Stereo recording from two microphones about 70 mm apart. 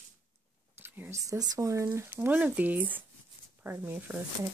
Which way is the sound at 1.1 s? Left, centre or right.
Right.